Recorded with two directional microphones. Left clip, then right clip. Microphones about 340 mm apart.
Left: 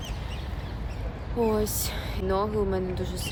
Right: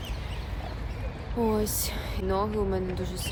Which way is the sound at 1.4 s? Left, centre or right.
Centre.